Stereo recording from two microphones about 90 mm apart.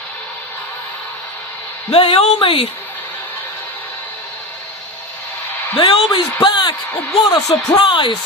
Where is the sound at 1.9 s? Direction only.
90° left.